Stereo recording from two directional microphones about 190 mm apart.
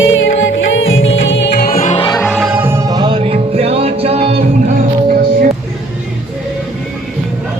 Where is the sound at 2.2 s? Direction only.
Centre (ahead or behind); by 4.7 s 35° right (ahead or behind).